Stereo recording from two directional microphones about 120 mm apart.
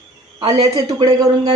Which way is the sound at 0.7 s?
35° right (ahead or behind).